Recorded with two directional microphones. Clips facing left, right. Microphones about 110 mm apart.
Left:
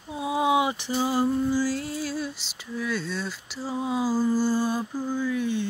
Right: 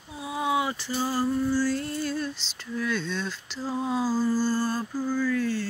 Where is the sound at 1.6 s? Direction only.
5° left (ahead or behind).